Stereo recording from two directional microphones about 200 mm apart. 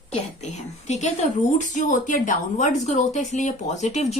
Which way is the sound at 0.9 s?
35° left (ahead or behind).